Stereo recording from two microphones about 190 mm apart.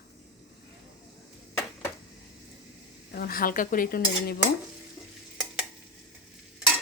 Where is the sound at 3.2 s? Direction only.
50° left (ahead or behind).